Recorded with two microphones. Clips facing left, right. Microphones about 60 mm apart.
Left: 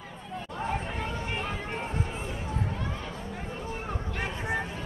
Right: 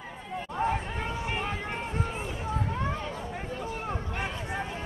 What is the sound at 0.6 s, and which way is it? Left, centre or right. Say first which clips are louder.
Chatter: right 5 dB; right.